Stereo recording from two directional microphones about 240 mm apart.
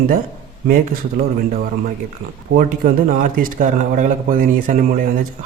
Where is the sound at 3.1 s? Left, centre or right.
Right.